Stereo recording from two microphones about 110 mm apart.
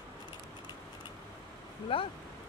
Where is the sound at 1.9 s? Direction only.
55° left (ahead or behind).